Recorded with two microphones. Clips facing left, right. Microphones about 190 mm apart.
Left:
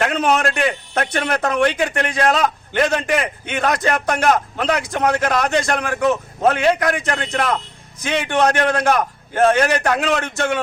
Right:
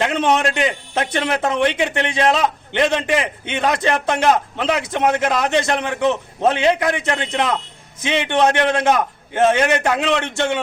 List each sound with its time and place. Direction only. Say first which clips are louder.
0.0 s a man's voice: even; 25° right (ahead or behind)